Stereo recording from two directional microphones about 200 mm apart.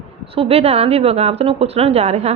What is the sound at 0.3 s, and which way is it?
A woman's voice, 30° right (ahead or behind).